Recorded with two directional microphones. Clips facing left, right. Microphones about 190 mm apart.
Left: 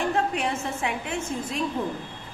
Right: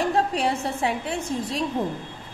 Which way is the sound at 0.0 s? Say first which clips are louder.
Right 3 dB; 35° right (ahead or behind).